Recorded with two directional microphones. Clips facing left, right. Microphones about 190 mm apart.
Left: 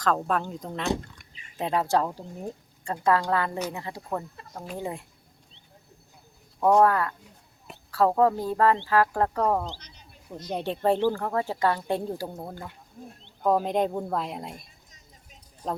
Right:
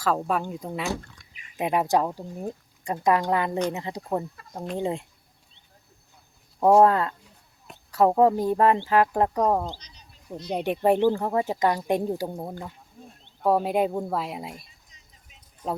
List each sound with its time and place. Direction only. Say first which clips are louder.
0.0 s speech: right 1 dB; 10° right (ahead or behind); by 5.0 s 25° right (ahead or behind)
6.7 s speech: right 3 dB; 25° right (ahead or behind); by 14.7 s 5° right (ahead or behind)